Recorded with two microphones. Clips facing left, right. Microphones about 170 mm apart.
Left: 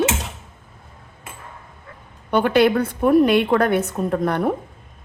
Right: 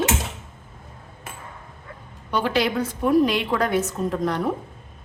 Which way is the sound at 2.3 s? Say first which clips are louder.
Left 6 dB; 55° left (ahead or behind).